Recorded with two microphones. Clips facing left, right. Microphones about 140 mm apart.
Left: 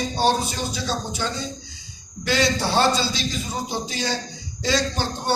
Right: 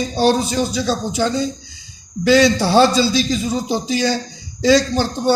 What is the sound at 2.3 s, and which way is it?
A man's voice, 90° right.